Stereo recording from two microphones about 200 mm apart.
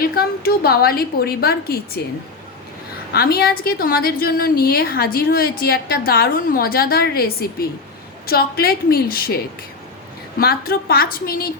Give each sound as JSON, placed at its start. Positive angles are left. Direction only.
{"t": 0.0, "sound": "a woman's voice", "side_deg": 50}
{"t": 3.1, "sound": "a woman's voice", "side_deg": 50}